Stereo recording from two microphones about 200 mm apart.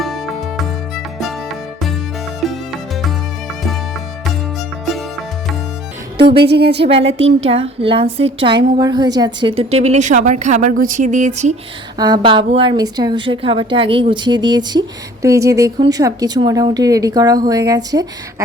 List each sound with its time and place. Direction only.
0.0 s music: centre (ahead or behind)
4.9 s music: centre (ahead or behind)
6.4 s speech: 55° right (ahead or behind)
6.8 s a woman's voice: 30° right (ahead or behind)
11.9 s speech: 20° right (ahead or behind)